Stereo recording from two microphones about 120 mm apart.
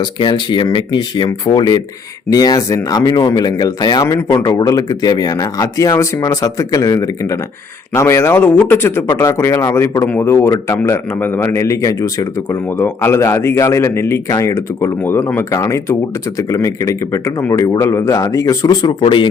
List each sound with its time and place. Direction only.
0.0 s speech: 40° left (ahead or behind)